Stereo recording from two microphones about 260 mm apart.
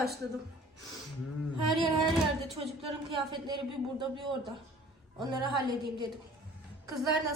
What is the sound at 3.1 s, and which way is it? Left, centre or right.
Speech, centre.